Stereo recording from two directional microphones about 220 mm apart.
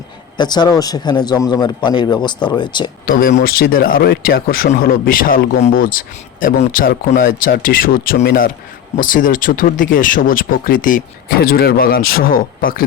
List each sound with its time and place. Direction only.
0.3 s a man's voice: 20° left (ahead or behind)
3.1 s speech: 40° left (ahead or behind)